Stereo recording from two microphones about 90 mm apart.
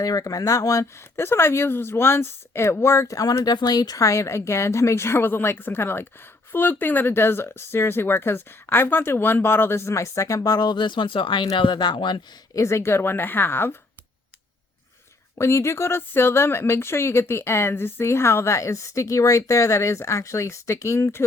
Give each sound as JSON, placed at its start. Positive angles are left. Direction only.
{"t": 0.0, "sound": "speech", "side_deg": 45}
{"t": 12.5, "sound": "speech", "side_deg": 30}
{"t": 15.4, "sound": "speech", "side_deg": 30}